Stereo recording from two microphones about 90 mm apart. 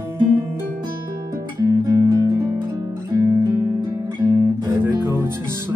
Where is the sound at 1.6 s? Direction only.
45° right (ahead or behind).